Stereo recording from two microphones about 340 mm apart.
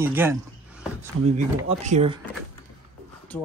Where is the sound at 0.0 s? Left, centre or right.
Centre.